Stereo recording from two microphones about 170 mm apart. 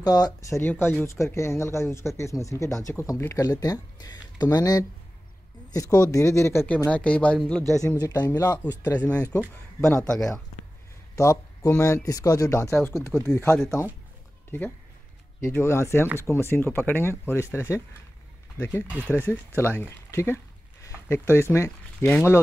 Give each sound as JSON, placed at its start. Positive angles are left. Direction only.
{"t": 0.0, "sound": "speech", "side_deg": 20}
{"t": 7.8, "sound": "speech", "side_deg": 20}
{"t": 9.3, "sound": "speech", "side_deg": 10}
{"t": 11.1, "sound": "speech", "side_deg": 20}
{"t": 15.4, "sound": "speech", "side_deg": 15}